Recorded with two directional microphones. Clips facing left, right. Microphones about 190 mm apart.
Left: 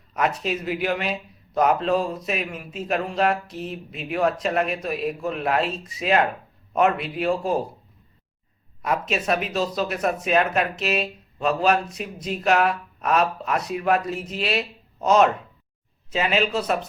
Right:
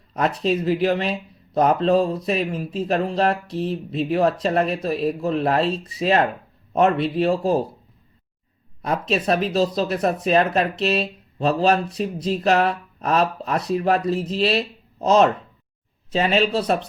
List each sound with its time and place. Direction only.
0.1 s speech: 35° right (ahead or behind)
8.8 s speech: 35° right (ahead or behind)